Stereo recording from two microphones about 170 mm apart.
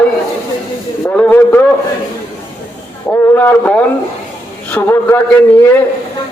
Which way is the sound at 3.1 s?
10° left (ahead or behind).